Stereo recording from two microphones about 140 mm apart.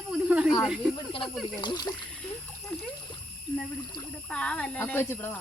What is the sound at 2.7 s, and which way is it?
Speech, 5° left (ahead or behind).